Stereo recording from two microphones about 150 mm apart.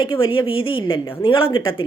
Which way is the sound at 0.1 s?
35° left (ahead or behind).